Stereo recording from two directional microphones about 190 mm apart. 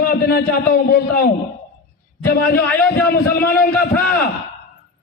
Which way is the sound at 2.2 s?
55° left (ahead or behind).